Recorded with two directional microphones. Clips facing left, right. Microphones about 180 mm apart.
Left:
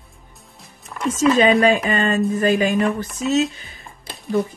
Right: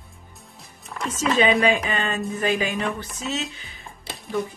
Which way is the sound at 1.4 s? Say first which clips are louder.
Left 1 dB; 45° left (ahead or behind).